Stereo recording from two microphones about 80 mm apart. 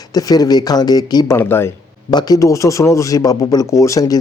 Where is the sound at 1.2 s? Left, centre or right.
Left.